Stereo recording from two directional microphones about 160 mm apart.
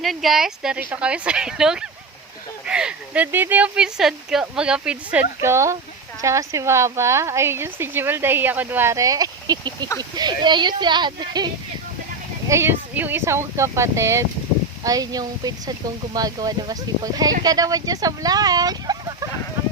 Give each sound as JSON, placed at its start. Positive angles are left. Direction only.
{"t": 0.0, "sound": "speech", "side_deg": 0}
{"t": 12.5, "sound": "speech", "side_deg": -15}